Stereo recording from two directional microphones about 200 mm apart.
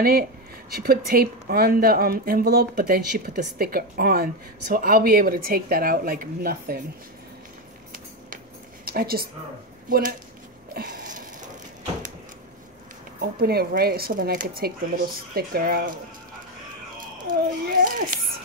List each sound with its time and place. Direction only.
0.0 s speech: 50° right (ahead or behind)
8.8 s a woman's voice: 50° right (ahead or behind)
10.7 s a sound: 45° right (ahead or behind)
13.2 s speech: 50° right (ahead or behind)
17.3 s speech: 45° right (ahead or behind)